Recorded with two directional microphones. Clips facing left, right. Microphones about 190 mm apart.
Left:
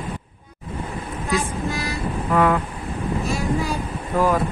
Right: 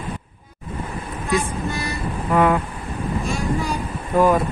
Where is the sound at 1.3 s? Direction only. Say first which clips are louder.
Right 1 dB; centre (ahead or behind).